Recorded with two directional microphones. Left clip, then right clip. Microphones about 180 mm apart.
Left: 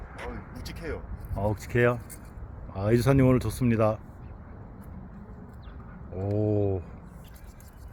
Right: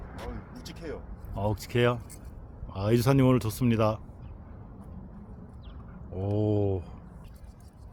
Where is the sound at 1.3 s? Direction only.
Centre (ahead or behind).